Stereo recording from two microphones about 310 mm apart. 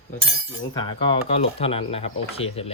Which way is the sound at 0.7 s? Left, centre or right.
Centre.